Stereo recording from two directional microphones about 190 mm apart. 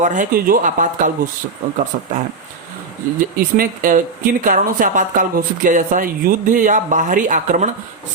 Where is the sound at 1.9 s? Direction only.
45° right (ahead or behind).